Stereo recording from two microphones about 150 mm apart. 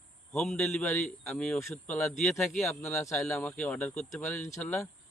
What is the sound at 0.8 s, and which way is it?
A man's voice, 15° left (ahead or behind).